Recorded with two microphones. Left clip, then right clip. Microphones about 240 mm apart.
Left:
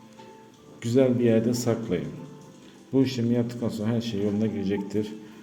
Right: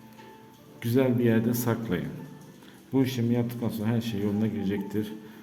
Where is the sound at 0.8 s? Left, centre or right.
Centre.